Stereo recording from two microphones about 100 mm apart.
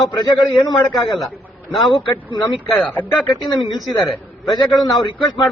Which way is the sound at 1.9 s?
50° left (ahead or behind).